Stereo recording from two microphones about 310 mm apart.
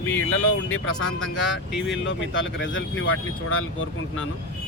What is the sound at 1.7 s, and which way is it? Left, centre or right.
Speech, centre.